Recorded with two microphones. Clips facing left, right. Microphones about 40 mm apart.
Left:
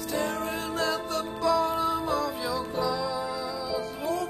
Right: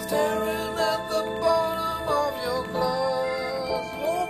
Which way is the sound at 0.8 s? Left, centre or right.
Centre.